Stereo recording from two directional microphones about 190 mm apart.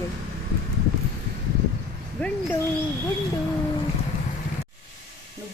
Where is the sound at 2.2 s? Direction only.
10° left (ahead or behind).